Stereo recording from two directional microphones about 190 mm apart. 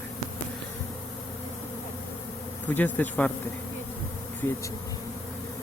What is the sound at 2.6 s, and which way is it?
Speech, 10° left (ahead or behind).